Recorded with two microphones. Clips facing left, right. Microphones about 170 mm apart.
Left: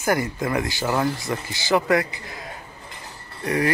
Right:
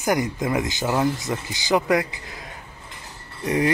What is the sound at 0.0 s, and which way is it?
Speech, 15° right (ahead or behind).